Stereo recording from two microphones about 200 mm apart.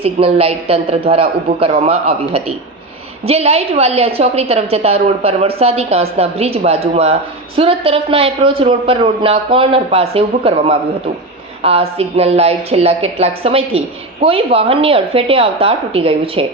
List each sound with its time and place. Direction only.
0.0 s a woman's voice: 30° right (ahead or behind)